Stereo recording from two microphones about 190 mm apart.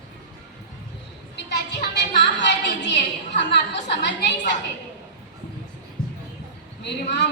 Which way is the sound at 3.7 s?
65° left (ahead or behind).